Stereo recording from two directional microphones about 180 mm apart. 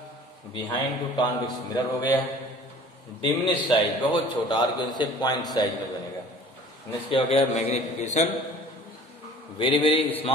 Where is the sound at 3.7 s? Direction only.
25° left (ahead or behind).